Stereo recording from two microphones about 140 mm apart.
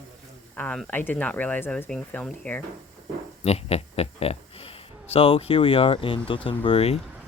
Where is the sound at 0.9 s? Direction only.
15° left (ahead or behind).